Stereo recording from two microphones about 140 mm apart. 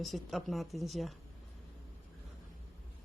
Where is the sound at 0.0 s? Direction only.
Centre (ahead or behind).